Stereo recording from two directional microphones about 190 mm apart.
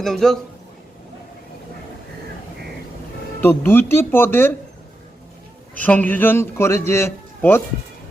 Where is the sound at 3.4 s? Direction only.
10° left (ahead or behind).